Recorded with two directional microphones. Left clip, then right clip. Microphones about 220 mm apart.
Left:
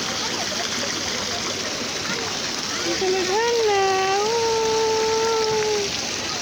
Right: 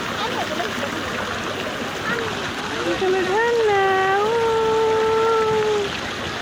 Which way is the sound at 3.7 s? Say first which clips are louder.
Right 2 dB; 20° left (ahead or behind).